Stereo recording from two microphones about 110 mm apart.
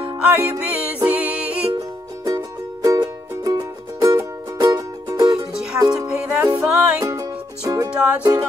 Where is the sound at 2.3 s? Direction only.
35° right (ahead or behind).